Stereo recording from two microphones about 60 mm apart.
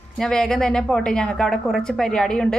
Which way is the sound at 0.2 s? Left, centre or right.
Centre.